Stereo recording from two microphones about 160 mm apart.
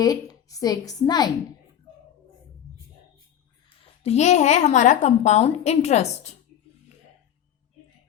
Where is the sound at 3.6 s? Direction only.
40° left (ahead or behind).